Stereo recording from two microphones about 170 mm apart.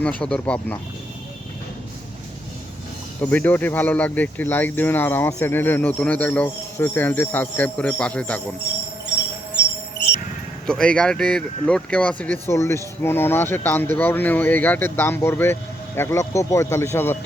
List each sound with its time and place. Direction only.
0.0 s speech: 5° left (ahead or behind)
3.2 s speech: 10° left (ahead or behind)
10.7 s speech: 5° left (ahead or behind)